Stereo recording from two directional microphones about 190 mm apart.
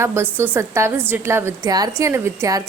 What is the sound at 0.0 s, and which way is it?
A woman's voice, 15° right (ahead or behind).